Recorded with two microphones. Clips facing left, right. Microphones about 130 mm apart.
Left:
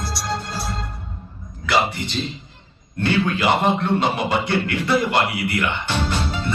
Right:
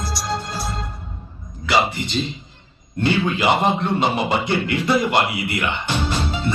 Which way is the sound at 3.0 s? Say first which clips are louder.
Right 1 dB; 20° right (ahead or behind).